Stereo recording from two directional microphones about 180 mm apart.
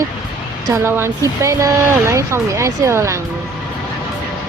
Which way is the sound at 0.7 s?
15° right (ahead or behind).